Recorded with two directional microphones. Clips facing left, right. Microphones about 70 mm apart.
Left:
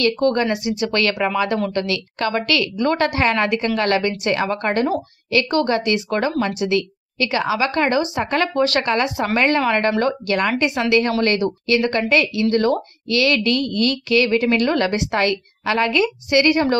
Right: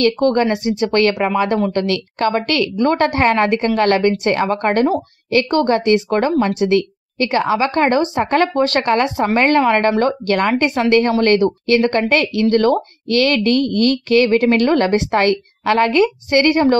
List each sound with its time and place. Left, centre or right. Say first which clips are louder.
0.0 s a woman's voice: right 3 dB; right
1.7 s a woman's voice: right 4 dB; right
9.4 s a woman's voice: right 4 dB; right